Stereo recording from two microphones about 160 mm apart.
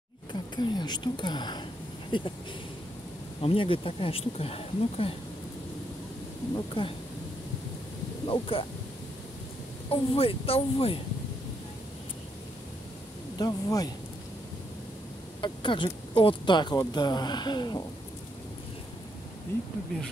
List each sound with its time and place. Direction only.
0.3 s speech: 25° left (ahead or behind)
3.3 s speech: 35° left (ahead or behind)
6.8 s speech: 30° left (ahead or behind)
8.3 s speech: 35° left (ahead or behind)
9.8 s speech: 35° left (ahead or behind)
13.4 s speech: 20° left (ahead or behind)
15.4 s speech: 30° left (ahead or behind)